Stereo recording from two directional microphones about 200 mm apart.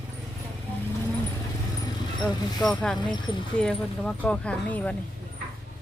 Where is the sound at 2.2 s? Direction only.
Centre (ahead or behind).